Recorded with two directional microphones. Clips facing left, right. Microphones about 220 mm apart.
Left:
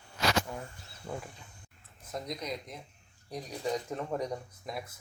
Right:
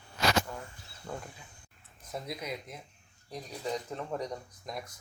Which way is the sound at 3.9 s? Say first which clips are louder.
Left 2 dB; 5° left (ahead or behind).